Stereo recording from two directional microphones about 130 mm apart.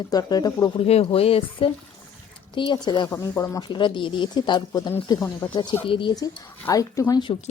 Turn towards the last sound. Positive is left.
turn(degrees=25)  # may be behind; listen again after turning